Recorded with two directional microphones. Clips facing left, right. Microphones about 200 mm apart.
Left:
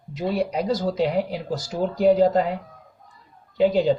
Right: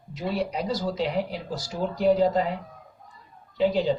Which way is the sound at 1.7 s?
55° left (ahead or behind).